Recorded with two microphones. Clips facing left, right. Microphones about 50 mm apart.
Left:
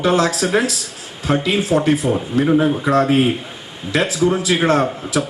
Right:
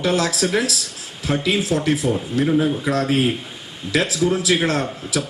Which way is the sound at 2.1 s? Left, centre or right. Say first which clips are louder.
Left 3 dB; centre.